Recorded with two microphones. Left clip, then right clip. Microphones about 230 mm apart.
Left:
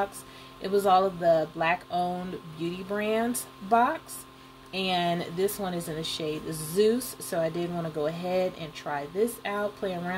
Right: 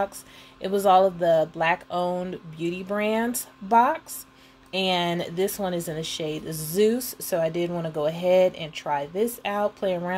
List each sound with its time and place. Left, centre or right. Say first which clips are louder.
0.6 s a woman's voice: right 4 dB; right